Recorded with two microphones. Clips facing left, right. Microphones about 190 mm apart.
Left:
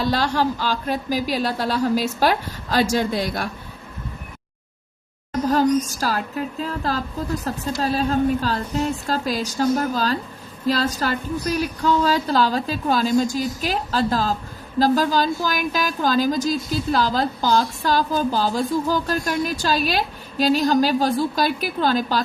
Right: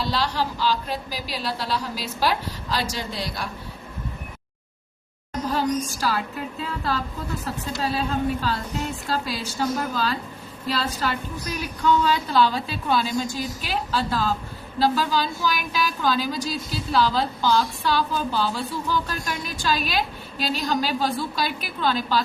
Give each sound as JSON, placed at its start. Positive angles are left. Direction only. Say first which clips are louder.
{"t": 0.0, "sound": "speech", "louder": "left 5 dB", "side_deg": 50}
{"t": 5.5, "sound": "a woman's voice", "louder": "left 6 dB", "side_deg": 45}